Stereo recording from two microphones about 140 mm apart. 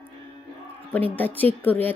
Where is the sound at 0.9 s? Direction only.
10° left (ahead or behind).